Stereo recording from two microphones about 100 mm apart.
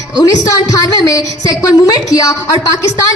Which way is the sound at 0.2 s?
35° left (ahead or behind).